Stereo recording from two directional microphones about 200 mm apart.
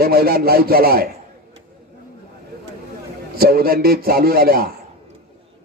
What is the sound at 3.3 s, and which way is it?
Speech, 50° right (ahead or behind).